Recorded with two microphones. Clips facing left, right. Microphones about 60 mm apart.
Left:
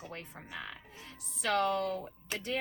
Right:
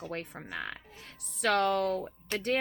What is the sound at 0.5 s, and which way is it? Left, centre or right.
A woman's voice, right.